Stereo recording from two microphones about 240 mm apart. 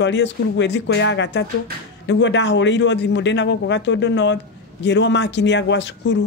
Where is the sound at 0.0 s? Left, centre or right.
Left.